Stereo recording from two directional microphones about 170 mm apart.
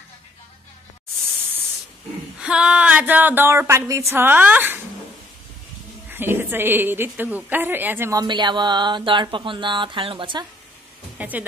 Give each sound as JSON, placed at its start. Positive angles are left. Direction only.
{"t": 2.3, "sound": "speech", "side_deg": -5}
{"t": 6.0, "sound": "a woman's voice", "side_deg": -10}
{"t": 11.1, "sound": "speech", "side_deg": -10}